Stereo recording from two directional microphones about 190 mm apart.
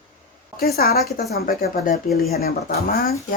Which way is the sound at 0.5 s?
55° left (ahead or behind).